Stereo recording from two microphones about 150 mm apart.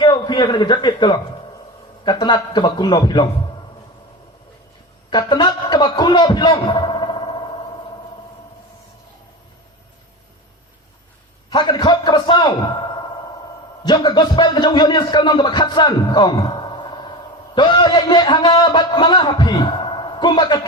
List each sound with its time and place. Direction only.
0.0 s a man's voice: 30° left (ahead or behind)
5.1 s a sound: 30° left (ahead or behind)
11.5 s a man's voice: 30° left (ahead or behind)